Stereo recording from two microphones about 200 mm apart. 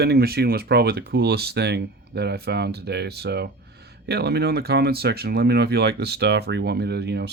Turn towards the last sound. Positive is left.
turn(degrees=-55)  # may be behind; listen again after turning